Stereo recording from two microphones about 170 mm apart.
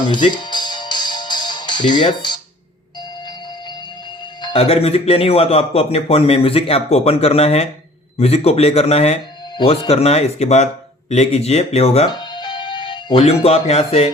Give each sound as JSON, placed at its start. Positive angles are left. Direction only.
{"t": 0.1, "sound": "music", "side_deg": 25}
{"t": 4.4, "sound": "speech", "side_deg": 35}
{"t": 12.2, "sound": "music", "side_deg": 25}